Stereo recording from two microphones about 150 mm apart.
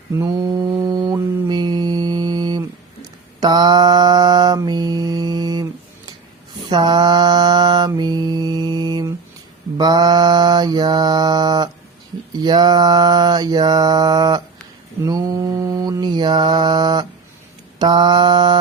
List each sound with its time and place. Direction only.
0.2 s mantra: 25° right (ahead or behind)
0.6 s a sound: 10° right (ahead or behind)
0.9 s mantra: 25° right (ahead or behind)
6.7 s mantra: 30° right (ahead or behind)